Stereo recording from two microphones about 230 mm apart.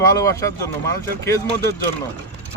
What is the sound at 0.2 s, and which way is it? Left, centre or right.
Speech, centre.